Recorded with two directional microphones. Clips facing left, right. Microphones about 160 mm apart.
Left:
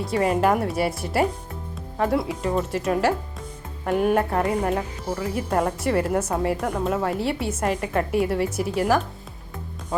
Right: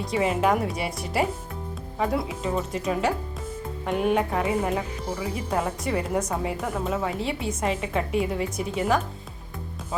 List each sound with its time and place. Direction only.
0.0 s a woman's voice: centre (ahead or behind)